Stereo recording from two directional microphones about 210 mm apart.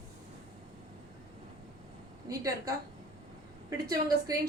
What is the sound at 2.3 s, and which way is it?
A woman's voice, 15° right (ahead or behind).